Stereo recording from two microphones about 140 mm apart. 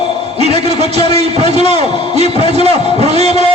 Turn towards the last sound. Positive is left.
turn(degrees=-50)  # may be behind; listen again after turning